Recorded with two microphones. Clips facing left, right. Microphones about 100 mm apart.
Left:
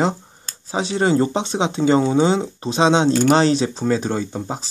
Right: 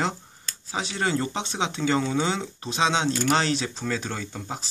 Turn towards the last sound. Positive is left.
turn(degrees=25)  # may be behind; listen again after turning